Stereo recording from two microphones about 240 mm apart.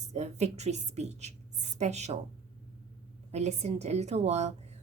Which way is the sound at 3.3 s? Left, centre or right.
Right.